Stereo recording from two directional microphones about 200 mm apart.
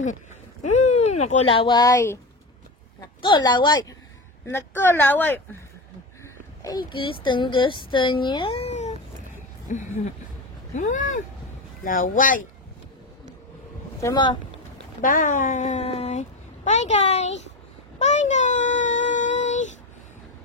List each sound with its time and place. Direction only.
0.0 s a sound: 40° left (ahead or behind); by 2.1 s 20° left (ahead or behind)
3.2 s speech: 20° left (ahead or behind)
6.9 s speech: 25° left (ahead or behind)
10.7 s vehicle: 40° left (ahead or behind)
11.8 s speech: 40° left (ahead or behind)
14.0 s speech: 20° left (ahead or behind)
15.0 s a child's voice: 40° left (ahead or behind)
17.9 s a sound: 35° left (ahead or behind)